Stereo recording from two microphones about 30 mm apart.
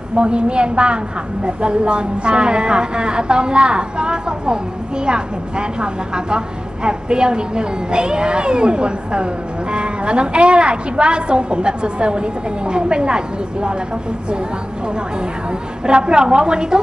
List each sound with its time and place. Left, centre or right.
0.1 s a woman's voice: right
15.8 s a woman's voice: right